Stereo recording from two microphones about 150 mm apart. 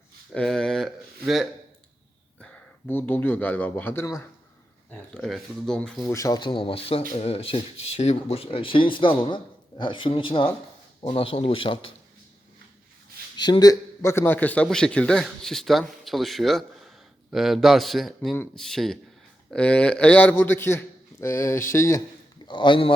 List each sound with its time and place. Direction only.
0.3 s speech: 5° left (ahead or behind)
2.4 s speech: 10° left (ahead or behind)
4.9 s a man's voice: 5° left (ahead or behind)
6.1 s speech: 20° left (ahead or behind)
13.3 s a man's voice: 30° left (ahead or behind)
22.4 s speech: 30° left (ahead or behind)